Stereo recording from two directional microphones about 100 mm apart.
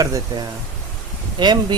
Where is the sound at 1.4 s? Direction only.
50° right (ahead or behind).